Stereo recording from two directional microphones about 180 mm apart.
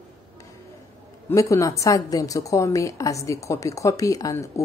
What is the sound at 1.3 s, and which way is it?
A woman's voice, 15° left (ahead or behind).